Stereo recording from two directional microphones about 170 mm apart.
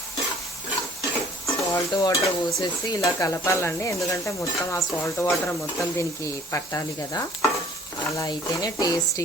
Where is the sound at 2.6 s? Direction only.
20° left (ahead or behind).